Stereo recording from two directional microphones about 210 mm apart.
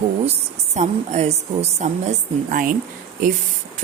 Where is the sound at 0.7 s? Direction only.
35° right (ahead or behind).